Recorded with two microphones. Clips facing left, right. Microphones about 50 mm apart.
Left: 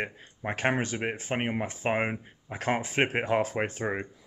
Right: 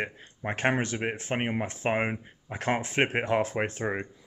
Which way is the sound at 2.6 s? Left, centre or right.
Centre.